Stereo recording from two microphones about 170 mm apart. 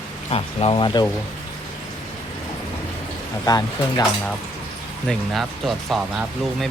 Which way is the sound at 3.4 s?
20° left (ahead or behind).